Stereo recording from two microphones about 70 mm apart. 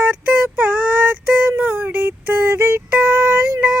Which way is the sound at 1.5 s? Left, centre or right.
Right.